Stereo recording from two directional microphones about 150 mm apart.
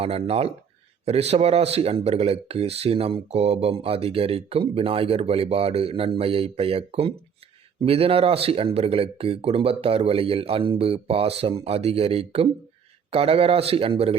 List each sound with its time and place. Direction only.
0.0 s speech: 40° right (ahead or behind)